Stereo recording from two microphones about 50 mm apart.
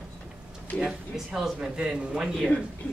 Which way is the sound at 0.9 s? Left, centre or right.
Centre.